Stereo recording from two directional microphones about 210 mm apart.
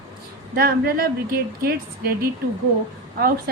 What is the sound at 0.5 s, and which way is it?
A woman's voice, 45° right (ahead or behind).